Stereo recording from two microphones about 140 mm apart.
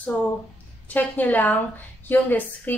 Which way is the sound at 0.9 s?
10° left (ahead or behind).